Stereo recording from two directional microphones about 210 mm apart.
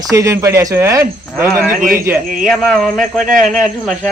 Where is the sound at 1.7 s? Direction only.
45° right (ahead or behind).